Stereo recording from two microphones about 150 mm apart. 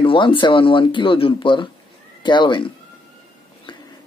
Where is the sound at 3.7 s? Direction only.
35° left (ahead or behind).